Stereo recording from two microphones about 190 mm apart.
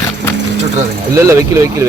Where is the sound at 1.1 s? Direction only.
15° right (ahead or behind).